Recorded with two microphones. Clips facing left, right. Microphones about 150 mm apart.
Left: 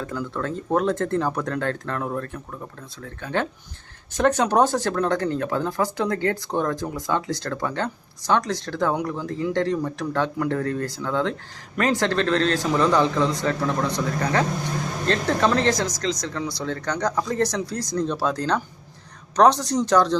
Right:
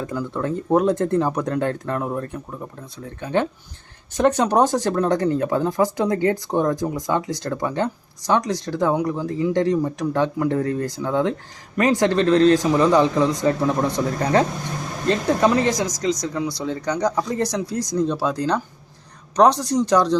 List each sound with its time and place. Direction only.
0.0 s speech: 15° right (ahead or behind)
15.0 s speech: 10° right (ahead or behind)